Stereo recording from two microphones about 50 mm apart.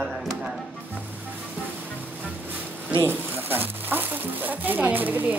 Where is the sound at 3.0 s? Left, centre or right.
Right.